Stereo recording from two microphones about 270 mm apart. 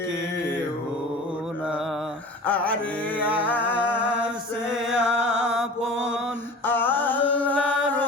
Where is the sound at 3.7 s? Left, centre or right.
Centre.